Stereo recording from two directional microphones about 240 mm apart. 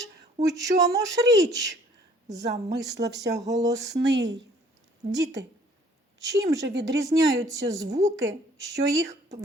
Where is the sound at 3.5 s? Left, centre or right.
Centre.